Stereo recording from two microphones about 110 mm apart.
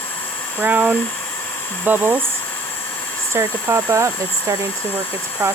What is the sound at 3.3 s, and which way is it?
Speech, 25° right (ahead or behind).